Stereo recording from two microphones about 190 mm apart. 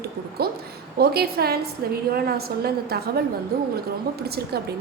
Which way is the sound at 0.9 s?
55° right (ahead or behind).